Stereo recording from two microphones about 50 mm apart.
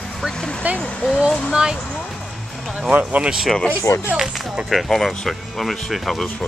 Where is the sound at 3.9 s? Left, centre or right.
Left.